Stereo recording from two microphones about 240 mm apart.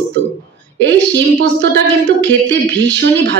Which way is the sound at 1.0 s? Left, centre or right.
Right.